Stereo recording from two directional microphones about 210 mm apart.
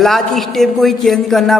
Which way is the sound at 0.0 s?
Centre (ahead or behind).